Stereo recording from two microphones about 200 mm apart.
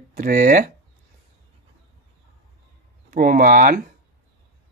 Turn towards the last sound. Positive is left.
turn(degrees=-45)  # may be behind; listen again after turning